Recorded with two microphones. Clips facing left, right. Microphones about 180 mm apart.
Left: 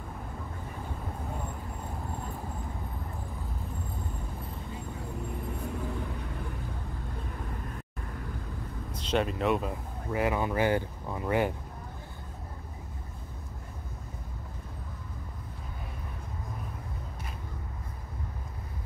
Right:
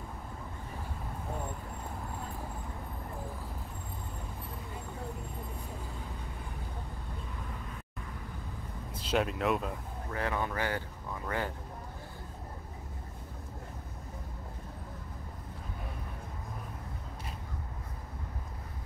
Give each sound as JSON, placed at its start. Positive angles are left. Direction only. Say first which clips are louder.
{"t": 8.9, "sound": "speech", "louder": "left 2 dB", "side_deg": -5}
{"t": 10.1, "sound": "speech", "louder": "left 6 dB", "side_deg": 10}